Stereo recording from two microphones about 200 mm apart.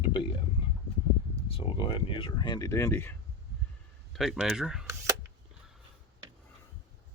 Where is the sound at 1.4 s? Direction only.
30° left (ahead or behind); by 3.1 s 10° left (ahead or behind).